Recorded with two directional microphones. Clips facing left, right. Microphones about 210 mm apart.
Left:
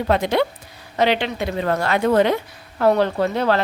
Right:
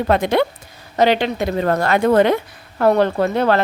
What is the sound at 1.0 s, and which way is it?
A woman's voice, 40° right (ahead or behind).